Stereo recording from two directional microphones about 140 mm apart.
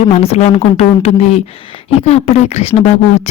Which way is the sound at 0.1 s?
50° left (ahead or behind).